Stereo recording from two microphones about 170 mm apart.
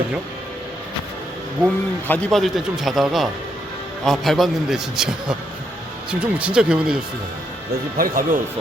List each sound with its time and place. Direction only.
1.6 s speech: 10° left (ahead or behind)
7.9 s speech: 55° right (ahead or behind)